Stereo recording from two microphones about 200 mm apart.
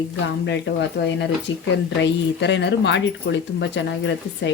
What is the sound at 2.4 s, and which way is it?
Speech, 60° left (ahead or behind).